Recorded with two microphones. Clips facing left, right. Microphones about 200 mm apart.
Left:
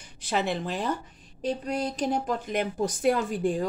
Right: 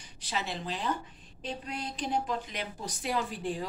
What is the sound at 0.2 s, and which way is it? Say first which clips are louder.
Speech: left 8 dB; 55° left (ahead or behind).